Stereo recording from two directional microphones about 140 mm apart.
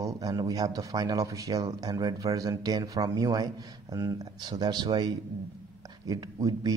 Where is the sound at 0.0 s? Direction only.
25° right (ahead or behind).